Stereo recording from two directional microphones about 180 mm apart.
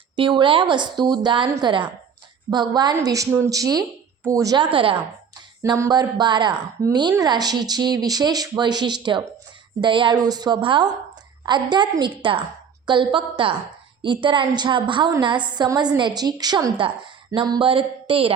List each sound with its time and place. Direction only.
0.2 s speech: 25° right (ahead or behind)